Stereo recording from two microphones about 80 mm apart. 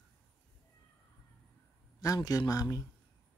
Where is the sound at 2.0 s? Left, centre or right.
Left.